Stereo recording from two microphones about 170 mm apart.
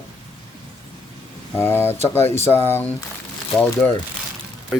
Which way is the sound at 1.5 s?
15° left (ahead or behind).